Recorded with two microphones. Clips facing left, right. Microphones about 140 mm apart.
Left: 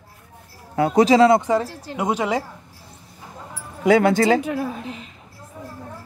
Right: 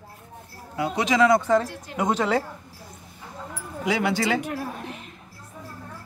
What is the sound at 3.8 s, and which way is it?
Speech, 50° left (ahead or behind).